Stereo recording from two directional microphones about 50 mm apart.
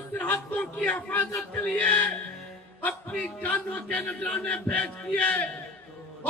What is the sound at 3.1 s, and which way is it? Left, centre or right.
Speech, left.